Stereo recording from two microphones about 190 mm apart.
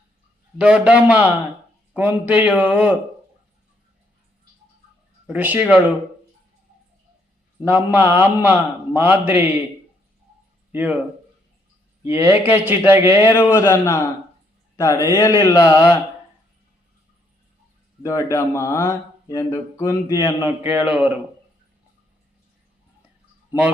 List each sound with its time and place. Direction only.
0.6 s speech: 5° right (ahead or behind)
5.3 s speech: 10° right (ahead or behind)
7.6 s speech: 10° right (ahead or behind)
10.7 s speech: 10° right (ahead or behind)
12.1 s speech: 10° right (ahead or behind)
13.3 s speech: 10° left (ahead or behind)
18.0 s speech: 15° left (ahead or behind)
20.4 s speech: 10° right (ahead or behind)